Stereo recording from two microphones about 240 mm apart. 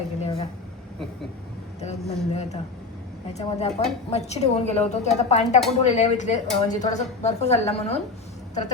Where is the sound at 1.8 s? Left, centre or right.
Left.